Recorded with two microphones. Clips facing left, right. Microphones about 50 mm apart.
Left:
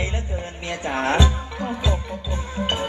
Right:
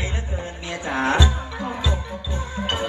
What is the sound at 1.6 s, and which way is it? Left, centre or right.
Music, right.